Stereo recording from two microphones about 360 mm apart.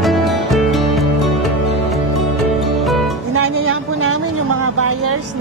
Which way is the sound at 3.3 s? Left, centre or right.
Right.